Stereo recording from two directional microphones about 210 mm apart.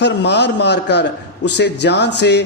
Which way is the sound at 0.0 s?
55° left (ahead or behind).